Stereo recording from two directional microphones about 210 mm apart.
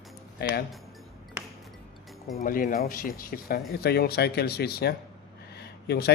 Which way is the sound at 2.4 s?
40° left (ahead or behind).